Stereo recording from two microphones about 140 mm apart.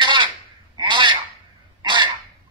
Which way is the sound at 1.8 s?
35° right (ahead or behind).